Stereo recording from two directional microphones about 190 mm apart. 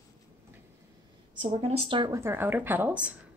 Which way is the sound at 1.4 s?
30° right (ahead or behind).